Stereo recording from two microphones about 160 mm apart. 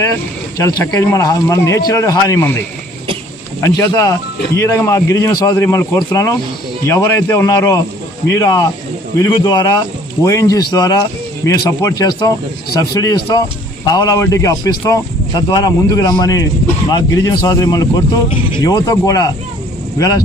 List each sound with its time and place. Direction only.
0.8 s speech: 20° left (ahead or behind)
3.6 s a man's voice: 20° left (ahead or behind)